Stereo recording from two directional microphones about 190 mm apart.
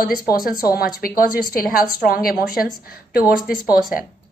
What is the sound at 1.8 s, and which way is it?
A woman's voice, 50° left (ahead or behind).